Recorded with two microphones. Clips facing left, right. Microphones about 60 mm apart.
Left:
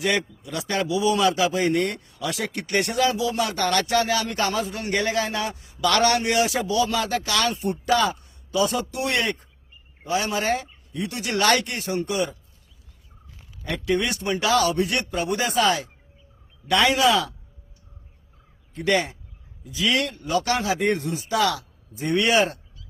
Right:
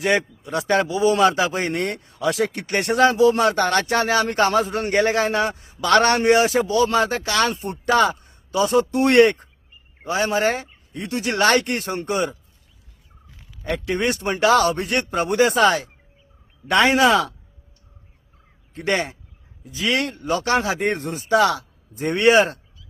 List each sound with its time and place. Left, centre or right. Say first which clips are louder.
0.0 s speech: right 4 dB; right
2.0 s speech: right 7 dB; right
9.0 s speech: right 13 dB; right
10.0 s speech: right 4 dB; right
11.6 s speech: right 2 dB; right
13.7 s speech: right 1 dB; right
18.7 s speech: even; right